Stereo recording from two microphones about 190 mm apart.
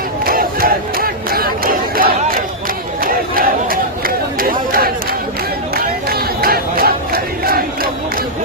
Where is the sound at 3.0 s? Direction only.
50° right (ahead or behind).